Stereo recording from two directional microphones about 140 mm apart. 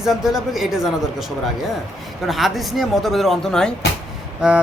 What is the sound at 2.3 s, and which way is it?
Speech, centre (ahead or behind).